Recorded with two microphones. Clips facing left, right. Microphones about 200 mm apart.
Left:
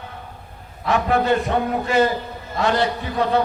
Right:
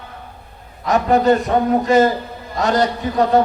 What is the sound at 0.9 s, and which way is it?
A man's voice, 40° right (ahead or behind).